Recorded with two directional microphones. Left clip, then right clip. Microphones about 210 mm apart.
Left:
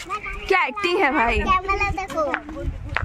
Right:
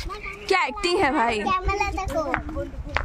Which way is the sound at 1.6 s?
30° right (ahead or behind).